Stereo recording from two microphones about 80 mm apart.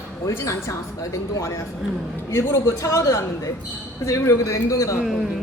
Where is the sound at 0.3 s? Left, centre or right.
Left.